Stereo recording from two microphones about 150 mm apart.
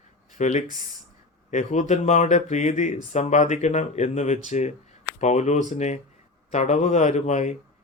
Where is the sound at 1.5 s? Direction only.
55° left (ahead or behind).